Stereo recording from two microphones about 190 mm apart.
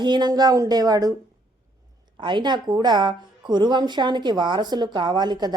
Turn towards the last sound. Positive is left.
turn(degrees=-20)  # may be behind; listen again after turning